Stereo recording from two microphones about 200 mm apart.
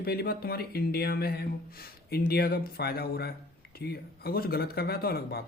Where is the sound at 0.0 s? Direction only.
50° left (ahead or behind).